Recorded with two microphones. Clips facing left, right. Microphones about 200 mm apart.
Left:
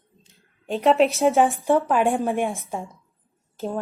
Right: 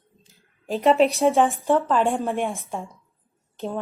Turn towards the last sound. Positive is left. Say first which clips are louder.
# left 1 dB
turn(degrees=0)  # may be behind; listen again after turning